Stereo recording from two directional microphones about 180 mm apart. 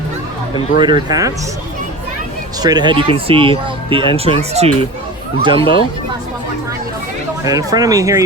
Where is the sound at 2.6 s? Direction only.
20° right (ahead or behind).